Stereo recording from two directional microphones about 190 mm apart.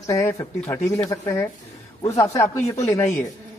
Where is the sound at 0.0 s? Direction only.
15° left (ahead or behind).